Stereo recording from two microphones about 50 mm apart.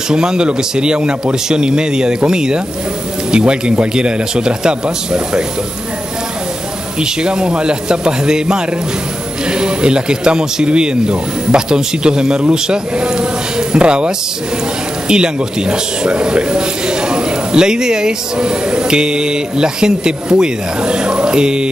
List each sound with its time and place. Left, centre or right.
0.1 s a man's voice: centre
7.0 s a man's voice: centre